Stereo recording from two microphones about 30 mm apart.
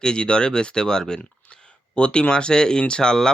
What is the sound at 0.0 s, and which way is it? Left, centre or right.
Speech, left.